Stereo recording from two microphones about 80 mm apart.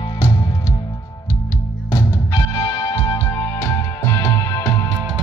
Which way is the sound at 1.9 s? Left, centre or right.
Left.